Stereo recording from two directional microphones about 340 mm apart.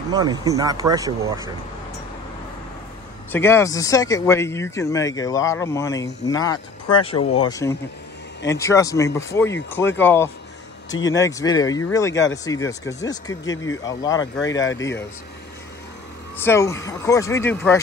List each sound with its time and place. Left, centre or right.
0.1 s speech: centre
3.3 s speech: centre
14.4 s speech: left
16.3 s speech: centre